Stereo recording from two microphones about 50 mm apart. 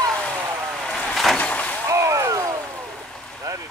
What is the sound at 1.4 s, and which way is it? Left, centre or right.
Vehicle, left.